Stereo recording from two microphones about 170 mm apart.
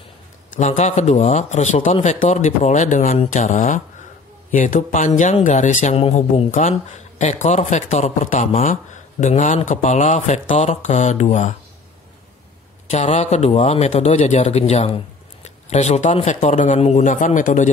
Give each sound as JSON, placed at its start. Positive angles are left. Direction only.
{"t": 0.6, "sound": "speech", "side_deg": 40}
{"t": 5.9, "sound": "speech", "side_deg": 35}
{"t": 12.9, "sound": "a man's voice", "side_deg": 40}